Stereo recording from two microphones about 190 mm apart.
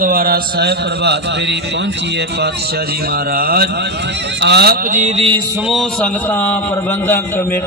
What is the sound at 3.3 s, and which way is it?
Speech, 50° right (ahead or behind).